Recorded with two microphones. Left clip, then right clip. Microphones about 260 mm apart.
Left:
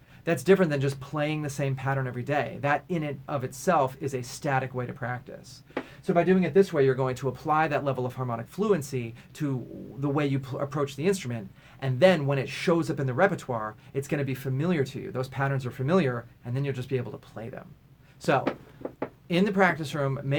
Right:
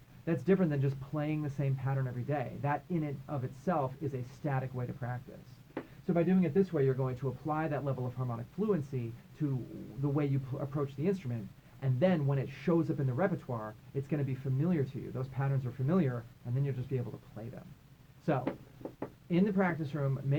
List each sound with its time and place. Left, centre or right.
0.3 s speech: centre
10.0 s speech: centre
18.9 s speech: centre